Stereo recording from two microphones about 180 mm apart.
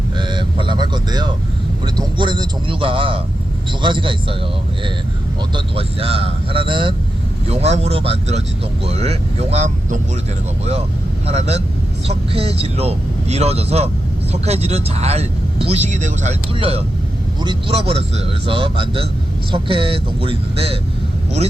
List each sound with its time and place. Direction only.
0.2 s a sound: 25° right (ahead or behind)
1.8 s a man's voice: 25° right (ahead or behind)
5.5 s speech: 30° right (ahead or behind)
11.3 s a man's voice: 35° right (ahead or behind)